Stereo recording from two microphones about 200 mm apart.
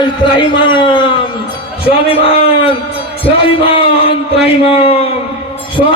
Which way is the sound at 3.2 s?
25° left (ahead or behind).